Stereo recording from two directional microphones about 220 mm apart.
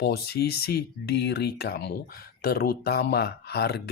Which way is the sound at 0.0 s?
45° left (ahead or behind).